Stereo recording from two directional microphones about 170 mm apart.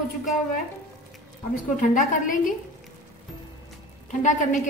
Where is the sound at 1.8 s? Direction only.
50° left (ahead or behind).